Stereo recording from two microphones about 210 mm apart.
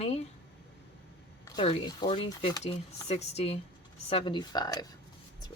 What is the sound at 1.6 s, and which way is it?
Speech, 25° left (ahead or behind).